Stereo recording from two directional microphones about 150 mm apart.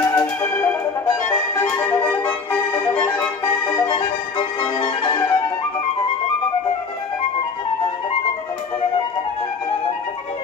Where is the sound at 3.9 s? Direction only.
30° left (ahead or behind).